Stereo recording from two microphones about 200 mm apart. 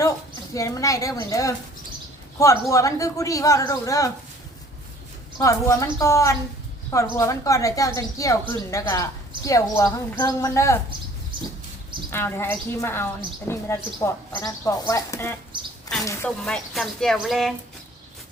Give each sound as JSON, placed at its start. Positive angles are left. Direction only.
{"t": 0.5, "sound": "speech", "side_deg": 15}
{"t": 5.4, "sound": "speech", "side_deg": 15}
{"t": 12.1, "sound": "speech", "side_deg": 10}